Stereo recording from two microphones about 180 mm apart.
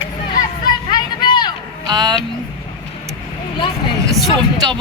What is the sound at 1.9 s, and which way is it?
Speech, 25° right (ahead or behind).